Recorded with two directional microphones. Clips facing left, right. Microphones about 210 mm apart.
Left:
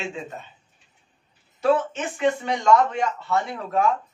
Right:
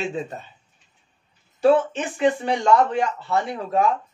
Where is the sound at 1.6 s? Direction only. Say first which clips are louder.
Right 4 dB; 30° right (ahead or behind).